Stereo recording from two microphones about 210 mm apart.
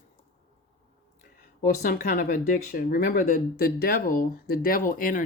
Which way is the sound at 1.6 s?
45° left (ahead or behind).